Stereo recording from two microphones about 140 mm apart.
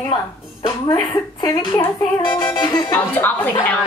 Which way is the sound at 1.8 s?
30° left (ahead or behind).